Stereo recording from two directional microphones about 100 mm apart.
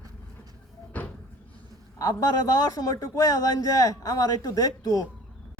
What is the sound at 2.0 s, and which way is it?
A man's voice, 35° left (ahead or behind).